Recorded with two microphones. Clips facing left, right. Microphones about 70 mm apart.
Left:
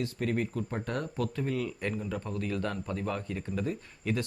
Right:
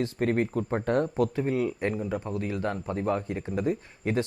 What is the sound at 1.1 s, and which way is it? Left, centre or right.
Speech, right.